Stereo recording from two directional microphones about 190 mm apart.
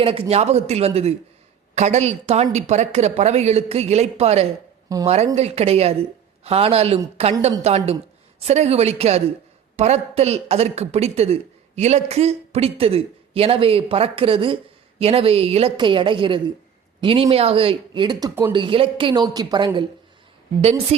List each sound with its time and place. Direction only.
0.0 s a man's voice: 30° right (ahead or behind)